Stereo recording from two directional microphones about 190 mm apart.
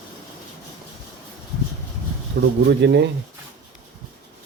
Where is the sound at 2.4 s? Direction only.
70° right (ahead or behind).